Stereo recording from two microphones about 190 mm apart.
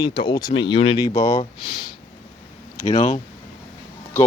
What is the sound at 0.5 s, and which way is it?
Speech, 70° left (ahead or behind).